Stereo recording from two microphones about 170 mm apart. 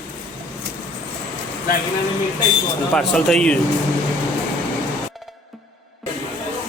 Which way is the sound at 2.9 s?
5° left (ahead or behind).